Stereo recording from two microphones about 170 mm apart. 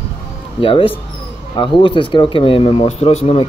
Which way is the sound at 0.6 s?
30° left (ahead or behind).